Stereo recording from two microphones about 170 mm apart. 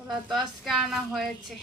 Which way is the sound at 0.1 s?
Centre (ahead or behind).